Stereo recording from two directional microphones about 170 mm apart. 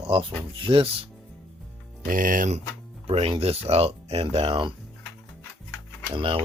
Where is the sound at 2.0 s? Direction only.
55° right (ahead or behind).